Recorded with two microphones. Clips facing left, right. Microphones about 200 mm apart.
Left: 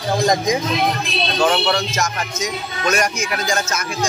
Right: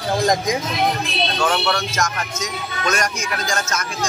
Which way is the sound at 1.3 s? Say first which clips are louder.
Left 4 dB; 15° left (ahead or behind).